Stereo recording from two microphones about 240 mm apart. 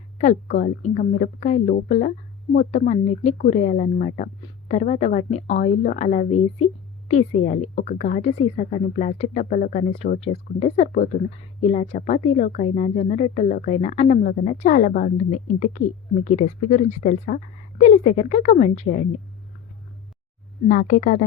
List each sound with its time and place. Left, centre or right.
0.2 s speech: left
20.7 s speech: left